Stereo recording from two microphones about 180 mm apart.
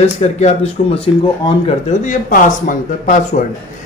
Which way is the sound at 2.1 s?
50° left (ahead or behind).